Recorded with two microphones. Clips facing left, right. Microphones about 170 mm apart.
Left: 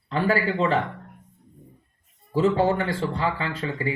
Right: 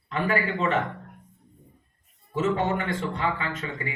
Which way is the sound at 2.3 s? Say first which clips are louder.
Left 4 dB; 30° left (ahead or behind).